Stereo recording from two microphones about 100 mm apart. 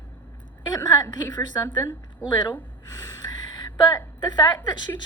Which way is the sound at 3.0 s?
45° left (ahead or behind).